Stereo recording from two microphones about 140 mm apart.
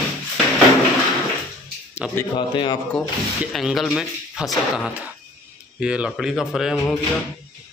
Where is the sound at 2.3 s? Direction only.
35° left (ahead or behind).